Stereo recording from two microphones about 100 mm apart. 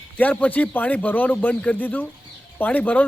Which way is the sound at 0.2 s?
15° left (ahead or behind).